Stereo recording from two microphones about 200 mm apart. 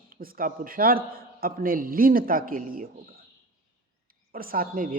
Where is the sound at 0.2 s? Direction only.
45° right (ahead or behind).